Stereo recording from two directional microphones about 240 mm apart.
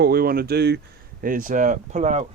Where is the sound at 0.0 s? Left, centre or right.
Right.